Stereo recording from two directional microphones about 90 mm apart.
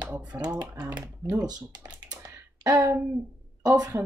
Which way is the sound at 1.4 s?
45° right (ahead or behind).